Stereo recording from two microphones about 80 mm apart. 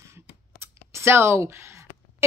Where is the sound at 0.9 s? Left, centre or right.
Right.